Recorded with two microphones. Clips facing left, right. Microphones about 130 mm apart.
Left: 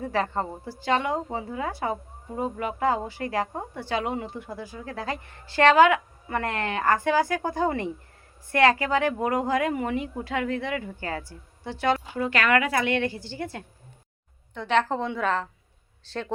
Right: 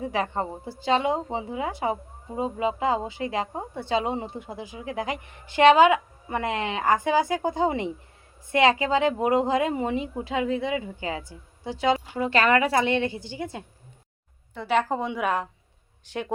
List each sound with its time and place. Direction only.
0.0 s a woman's voice: 15° right (ahead or behind)
14.5 s a woman's voice: 5° right (ahead or behind)